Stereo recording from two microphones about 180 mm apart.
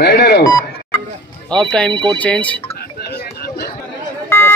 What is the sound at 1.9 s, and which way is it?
Speech, 25° right (ahead or behind).